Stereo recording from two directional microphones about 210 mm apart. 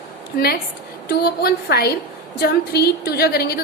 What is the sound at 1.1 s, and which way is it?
A woman's voice, 45° left (ahead or behind).